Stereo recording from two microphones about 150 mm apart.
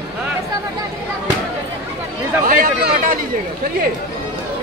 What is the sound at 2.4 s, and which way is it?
Speech, 65° right (ahead or behind).